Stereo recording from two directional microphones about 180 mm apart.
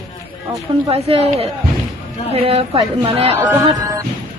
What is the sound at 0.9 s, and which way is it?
A woman's voice, 30° right (ahead or behind).